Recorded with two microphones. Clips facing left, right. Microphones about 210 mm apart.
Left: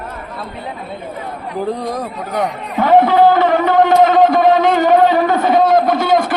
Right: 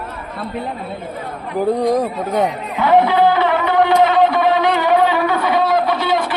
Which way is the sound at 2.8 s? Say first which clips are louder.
Left 3 dB; 45° left (ahead or behind).